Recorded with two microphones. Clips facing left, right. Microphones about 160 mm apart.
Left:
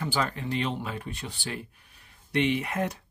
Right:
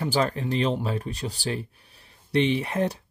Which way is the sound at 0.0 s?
35° right (ahead or behind).